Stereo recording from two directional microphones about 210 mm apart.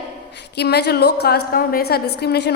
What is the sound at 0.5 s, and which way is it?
A woman's voice, 50° left (ahead or behind).